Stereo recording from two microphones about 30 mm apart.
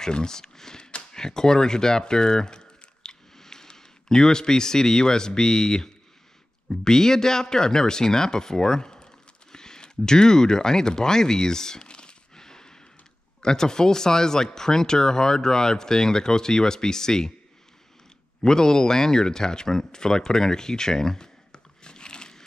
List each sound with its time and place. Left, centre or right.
0.0 s speech: left
9.0 s a sound: left
13.4 s speech: left
18.4 s speech: left
21.5 s biting: left